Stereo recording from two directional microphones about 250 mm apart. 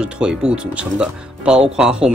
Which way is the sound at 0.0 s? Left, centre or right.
Centre.